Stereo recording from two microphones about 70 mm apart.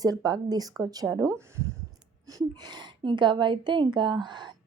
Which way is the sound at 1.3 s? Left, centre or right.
Right.